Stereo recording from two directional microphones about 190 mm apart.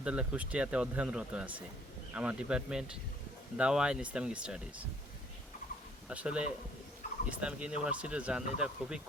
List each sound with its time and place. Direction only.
0.0 s speech: 5° right (ahead or behind)
6.1 s speech: 5° right (ahead or behind)